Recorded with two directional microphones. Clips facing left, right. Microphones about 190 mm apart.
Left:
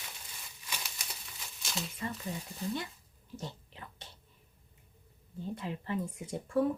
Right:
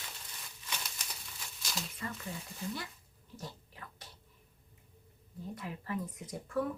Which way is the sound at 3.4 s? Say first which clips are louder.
Left 3 dB; 25° left (ahead or behind).